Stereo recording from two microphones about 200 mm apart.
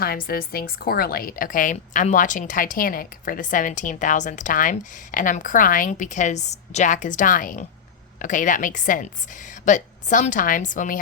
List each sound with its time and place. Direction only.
0.0 s a woman's voice: 50° left (ahead or behind)